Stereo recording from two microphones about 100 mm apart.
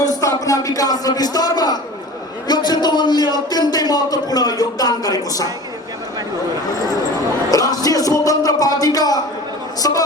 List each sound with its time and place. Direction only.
0.0 s a man's voice: 35° left (ahead or behind)
7.5 s speech: 40° left (ahead or behind)